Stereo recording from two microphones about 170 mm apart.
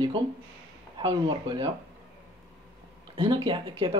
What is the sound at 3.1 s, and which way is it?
Speech, 30° right (ahead or behind).